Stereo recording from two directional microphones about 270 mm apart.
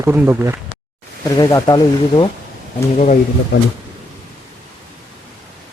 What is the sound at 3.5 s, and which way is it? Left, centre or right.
Speech, left.